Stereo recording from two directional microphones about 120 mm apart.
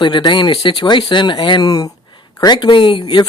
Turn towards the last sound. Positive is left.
turn(degrees=40)  # may be behind; listen again after turning